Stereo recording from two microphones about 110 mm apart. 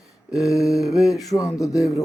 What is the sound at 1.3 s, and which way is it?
Speech, 30° left (ahead or behind).